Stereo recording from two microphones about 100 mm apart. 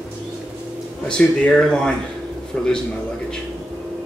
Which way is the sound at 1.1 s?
10° left (ahead or behind).